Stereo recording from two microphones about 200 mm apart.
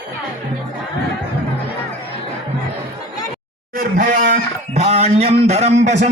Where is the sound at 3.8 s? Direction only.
40° right (ahead or behind).